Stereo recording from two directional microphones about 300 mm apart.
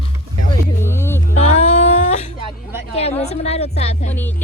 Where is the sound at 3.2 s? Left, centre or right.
Left.